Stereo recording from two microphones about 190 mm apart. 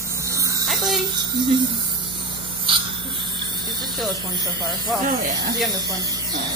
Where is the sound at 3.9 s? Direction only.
Centre (ahead or behind).